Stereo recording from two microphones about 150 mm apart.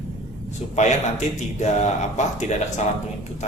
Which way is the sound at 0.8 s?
50° left (ahead or behind).